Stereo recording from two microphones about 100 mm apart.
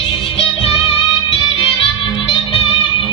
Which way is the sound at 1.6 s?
55° left (ahead or behind).